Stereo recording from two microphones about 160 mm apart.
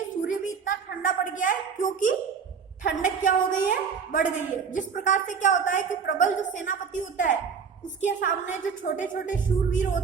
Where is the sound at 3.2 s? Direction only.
55° left (ahead or behind).